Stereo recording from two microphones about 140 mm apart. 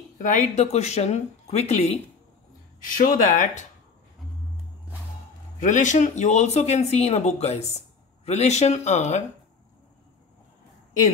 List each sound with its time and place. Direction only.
0.2 s speech: 60° left (ahead or behind)
2.8 s speech: 70° left (ahead or behind)
5.6 s speech: 60° left (ahead or behind)